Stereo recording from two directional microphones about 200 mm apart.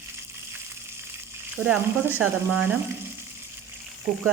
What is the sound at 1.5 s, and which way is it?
Speech, 10° right (ahead or behind).